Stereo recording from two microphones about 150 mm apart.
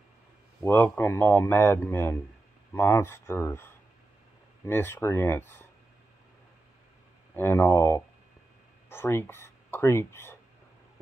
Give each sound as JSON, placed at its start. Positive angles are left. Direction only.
{"t": 0.7, "sound": "speech", "side_deg": 15}
{"t": 7.3, "sound": "speech", "side_deg": 15}